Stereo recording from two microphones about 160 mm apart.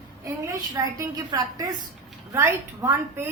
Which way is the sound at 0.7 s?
25° right (ahead or behind).